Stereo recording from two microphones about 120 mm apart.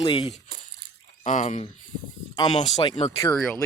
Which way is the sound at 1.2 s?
90° left.